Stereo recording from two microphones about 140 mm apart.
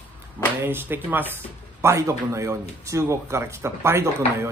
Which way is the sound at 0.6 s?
15° right (ahead or behind).